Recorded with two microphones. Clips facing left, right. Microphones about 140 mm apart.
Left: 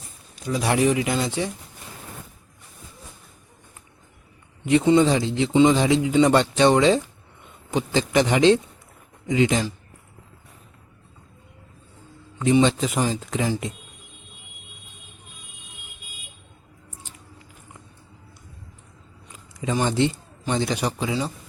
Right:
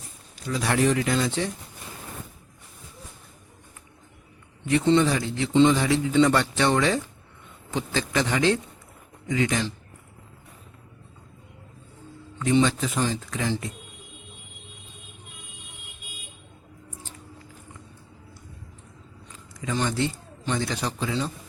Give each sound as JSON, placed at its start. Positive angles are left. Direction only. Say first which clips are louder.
{"t": 0.4, "sound": "speech", "louder": "left 2 dB", "side_deg": 15}
{"t": 4.6, "sound": "a man's voice", "louder": "left 3 dB", "side_deg": 15}
{"t": 12.6, "sound": "a man's voice", "louder": "left 3 dB", "side_deg": 20}
{"t": 19.3, "sound": "a sound", "louder": "left 4 dB", "side_deg": 20}
{"t": 20.5, "sound": "speech", "louder": "left 4 dB", "side_deg": 20}